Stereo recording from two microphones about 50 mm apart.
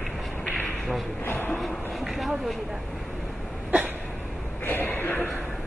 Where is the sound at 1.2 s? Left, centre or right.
Left.